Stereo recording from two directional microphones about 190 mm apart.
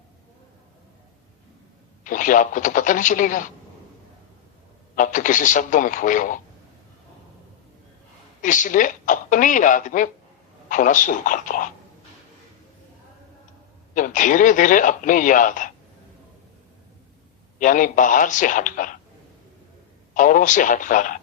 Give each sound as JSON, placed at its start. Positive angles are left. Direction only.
{"t": 2.0, "sound": "speech", "side_deg": 45}
{"t": 4.9, "sound": "speech", "side_deg": 45}
{"t": 8.4, "sound": "speech", "side_deg": 45}
{"t": 13.9, "sound": "speech", "side_deg": 45}
{"t": 17.6, "sound": "speech", "side_deg": 45}
{"t": 20.1, "sound": "speech", "side_deg": 45}